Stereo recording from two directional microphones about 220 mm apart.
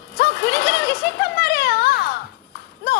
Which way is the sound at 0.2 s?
45° left (ahead or behind).